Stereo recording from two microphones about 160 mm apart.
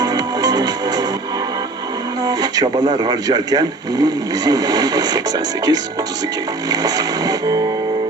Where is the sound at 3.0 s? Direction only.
25° right (ahead or behind).